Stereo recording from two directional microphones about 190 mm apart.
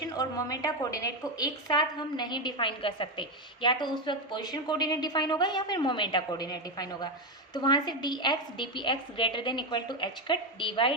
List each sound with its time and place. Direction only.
0.1 s a woman's voice: 20° left (ahead or behind)